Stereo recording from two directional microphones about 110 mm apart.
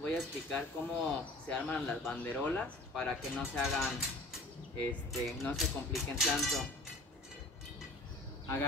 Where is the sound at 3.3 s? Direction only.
Centre (ahead or behind).